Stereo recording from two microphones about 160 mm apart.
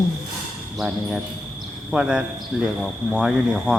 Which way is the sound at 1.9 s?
5° right (ahead or behind).